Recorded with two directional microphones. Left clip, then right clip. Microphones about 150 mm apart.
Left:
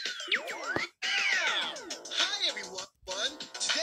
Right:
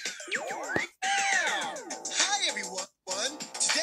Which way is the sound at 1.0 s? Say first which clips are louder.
Right 1 dB; 50° right (ahead or behind).